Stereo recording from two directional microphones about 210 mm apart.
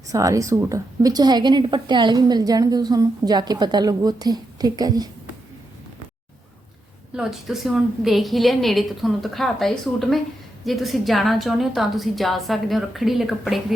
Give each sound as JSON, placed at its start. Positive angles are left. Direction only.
{"t": 0.1, "sound": "a woman's voice", "side_deg": -15}
{"t": 7.2, "sound": "a woman's voice", "side_deg": 0}